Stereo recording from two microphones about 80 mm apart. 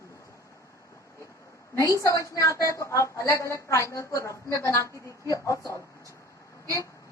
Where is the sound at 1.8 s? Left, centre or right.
Left.